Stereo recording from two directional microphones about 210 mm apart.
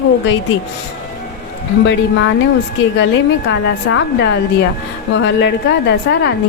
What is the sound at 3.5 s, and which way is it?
A woman's voice, 65° left (ahead or behind).